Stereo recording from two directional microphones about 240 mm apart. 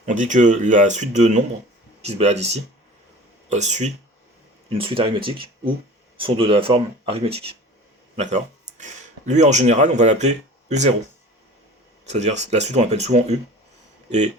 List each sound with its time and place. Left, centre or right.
0.0 s speech: right
12.0 s speech: right